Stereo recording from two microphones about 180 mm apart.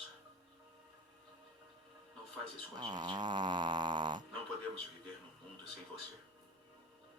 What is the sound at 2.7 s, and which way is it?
Speech, 25° right (ahead or behind).